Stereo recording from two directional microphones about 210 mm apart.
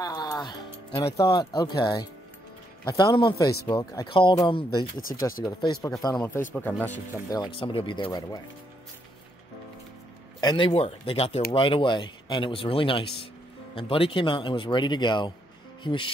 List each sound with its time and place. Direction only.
0.0 s music: 20° left (ahead or behind)
2.8 s speech: 20° left (ahead or behind)
4.9 s speech: 40° left (ahead or behind)
5.4 s speech: 20° left (ahead or behind)
5.8 s speech: 5° left (ahead or behind)
7.5 s speech: 25° left (ahead or behind)
10.4 s speech: 25° left (ahead or behind)